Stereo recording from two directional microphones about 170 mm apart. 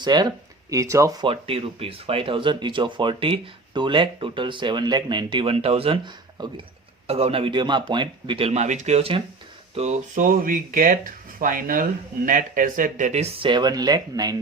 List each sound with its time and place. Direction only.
0.0 s speech: 25° right (ahead or behind)
1.3 s speech: 35° right (ahead or behind)